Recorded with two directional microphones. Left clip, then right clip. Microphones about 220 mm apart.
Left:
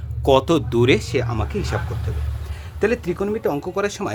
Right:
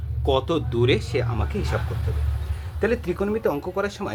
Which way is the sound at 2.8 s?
35° left (ahead or behind).